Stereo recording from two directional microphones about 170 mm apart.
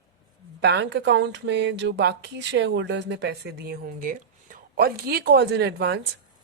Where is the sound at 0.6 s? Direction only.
90° right.